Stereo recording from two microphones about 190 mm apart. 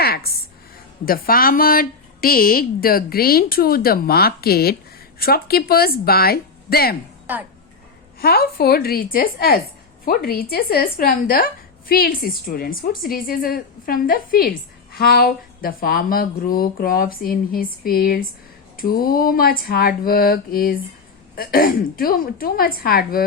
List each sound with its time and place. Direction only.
0.0 s a sound: 55° left (ahead or behind)
1.0 s speech: 50° left (ahead or behind)
8.2 s speech: 55° left (ahead or behind)